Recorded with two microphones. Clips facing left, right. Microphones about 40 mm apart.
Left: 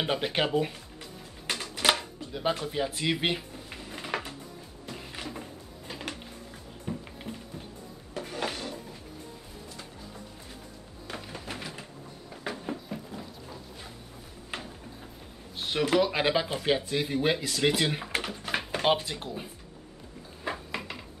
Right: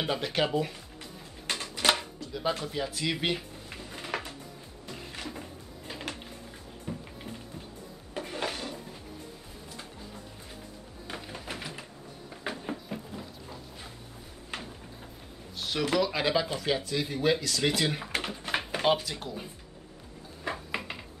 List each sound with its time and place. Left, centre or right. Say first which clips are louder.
0.0 s speech: left 1 dB; centre
1.5 s music: left 1 dB; centre
2.1 s chopping: left 1 dB; left
2.7 s speech: left 2 dB; centre
3.7 s a sound: left 1 dB; centre
4.9 s music: left 1 dB; centre
6.9 s music: left 2 dB; centre
8.4 s drawer open or close: left 1 dB; centre
11.1 s music: even; centre
13.1 s a sound: left 1 dB; centre
15.5 s speech: left 2 dB; left; by 18.9 s centre
18.9 s speech: even; centre
20.7 s a sound: right 1 dB; centre